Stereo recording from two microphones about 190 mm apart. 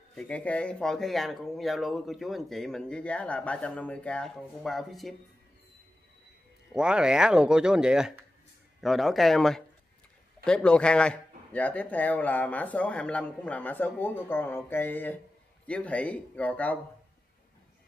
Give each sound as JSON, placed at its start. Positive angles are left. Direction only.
{"t": 0.1, "sound": "speech", "side_deg": 5}
{"t": 6.7, "sound": "a man's voice", "side_deg": -5}